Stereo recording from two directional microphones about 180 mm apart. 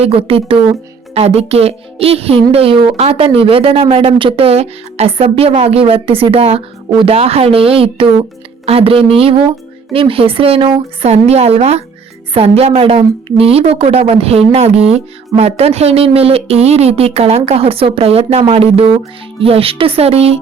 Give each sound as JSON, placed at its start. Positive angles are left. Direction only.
{"t": 0.0, "sound": "speech", "side_deg": -30}